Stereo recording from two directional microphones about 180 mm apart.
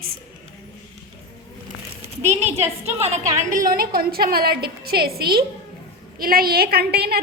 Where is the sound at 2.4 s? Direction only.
35° right (ahead or behind); by 7.2 s 65° right (ahead or behind).